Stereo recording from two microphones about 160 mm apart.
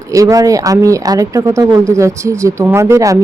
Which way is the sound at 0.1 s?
20° right (ahead or behind).